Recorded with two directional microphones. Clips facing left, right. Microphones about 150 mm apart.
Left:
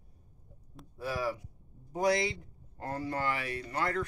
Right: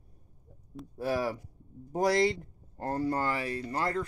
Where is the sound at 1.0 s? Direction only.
45° right (ahead or behind).